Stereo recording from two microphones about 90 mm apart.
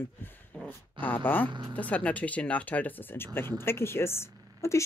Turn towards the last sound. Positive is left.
turn(degrees=30)  # may be behind; listen again after turning